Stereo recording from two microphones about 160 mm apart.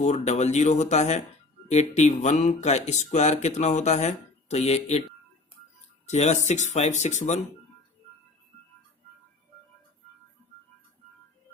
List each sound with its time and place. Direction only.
0.0 s speech: 45° left (ahead or behind)
6.1 s speech: 45° left (ahead or behind)